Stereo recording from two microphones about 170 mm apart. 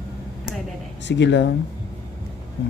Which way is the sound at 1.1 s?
90° left.